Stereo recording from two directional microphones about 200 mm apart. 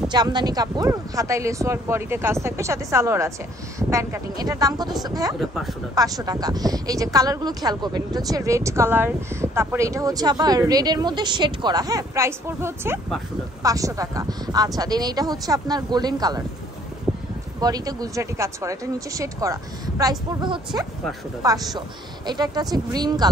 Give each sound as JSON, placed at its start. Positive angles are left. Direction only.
{"t": 0.1, "sound": "a woman's voice", "side_deg": -20}
{"t": 5.4, "sound": "a woman's voice", "side_deg": 0}
{"t": 5.9, "sound": "a woman's voice", "side_deg": -20}
{"t": 17.6, "sound": "a woman's voice", "side_deg": -20}